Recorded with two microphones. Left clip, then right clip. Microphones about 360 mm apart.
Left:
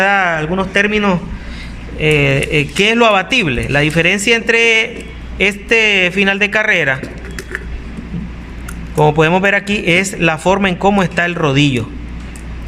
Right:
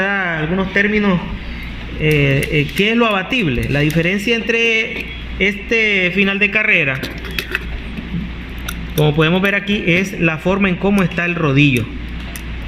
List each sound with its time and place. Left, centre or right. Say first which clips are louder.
0.0 s a man's voice: left 5 dB; left
9.0 s a man's voice: left 4 dB; left